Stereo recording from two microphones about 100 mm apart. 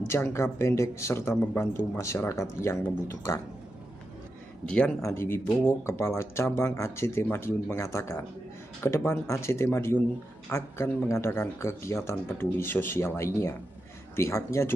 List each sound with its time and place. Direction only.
0.0 s speech: 25° left (ahead or behind)
4.6 s speech: 10° left (ahead or behind)
5.0 s speech: 25° left (ahead or behind)